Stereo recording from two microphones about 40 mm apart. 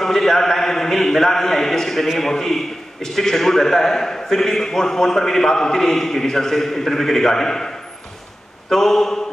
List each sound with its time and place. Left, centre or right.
0.0 s a man's voice: centre
8.6 s mantra: centre